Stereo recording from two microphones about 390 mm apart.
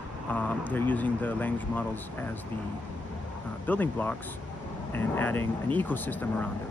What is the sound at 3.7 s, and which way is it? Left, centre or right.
Speech, centre.